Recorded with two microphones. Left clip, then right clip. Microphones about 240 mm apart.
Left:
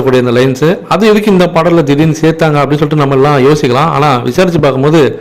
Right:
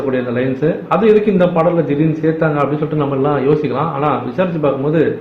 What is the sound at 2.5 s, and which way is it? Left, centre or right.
A man's voice, left.